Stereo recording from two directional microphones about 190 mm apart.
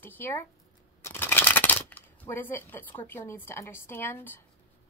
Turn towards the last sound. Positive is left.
turn(degrees=10)  # may be behind; listen again after turning